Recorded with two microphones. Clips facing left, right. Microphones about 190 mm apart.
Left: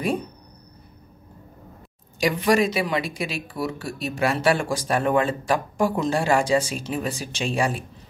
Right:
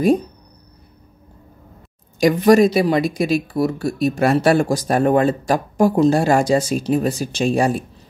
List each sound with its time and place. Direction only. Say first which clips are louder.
2.1 s speech: right 8 dB; 45° right (ahead or behind)